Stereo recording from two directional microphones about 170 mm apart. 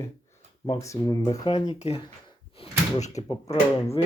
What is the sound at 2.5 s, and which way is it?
Door, 40° left (ahead or behind).